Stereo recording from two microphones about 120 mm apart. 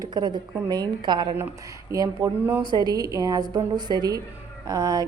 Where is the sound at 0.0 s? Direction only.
35° right (ahead or behind).